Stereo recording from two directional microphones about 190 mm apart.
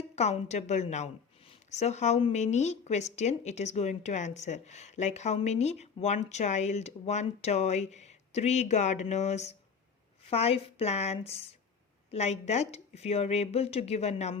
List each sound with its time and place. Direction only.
0.2 s a woman's voice: 35° left (ahead or behind)